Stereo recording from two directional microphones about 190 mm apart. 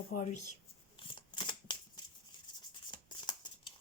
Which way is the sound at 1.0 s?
25° left (ahead or behind).